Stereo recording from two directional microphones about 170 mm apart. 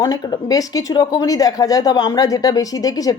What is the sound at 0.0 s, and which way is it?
Speech, 20° left (ahead or behind).